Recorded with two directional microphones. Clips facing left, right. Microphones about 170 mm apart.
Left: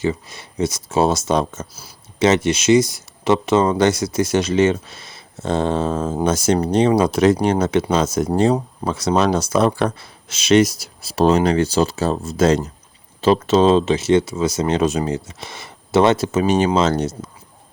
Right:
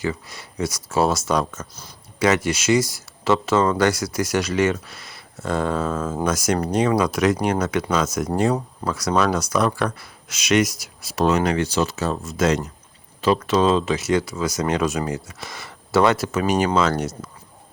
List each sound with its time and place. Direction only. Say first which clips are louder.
0.0 s speech: left 4 dB; 20° left (ahead or behind)